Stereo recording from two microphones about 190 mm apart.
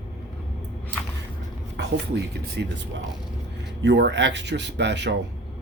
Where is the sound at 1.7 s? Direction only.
65° right (ahead or behind).